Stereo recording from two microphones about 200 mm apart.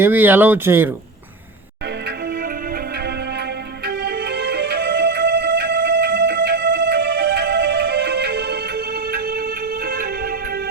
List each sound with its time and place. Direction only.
0.0 s speech: 10° right (ahead or behind)
3.8 s music: 55° right (ahead or behind)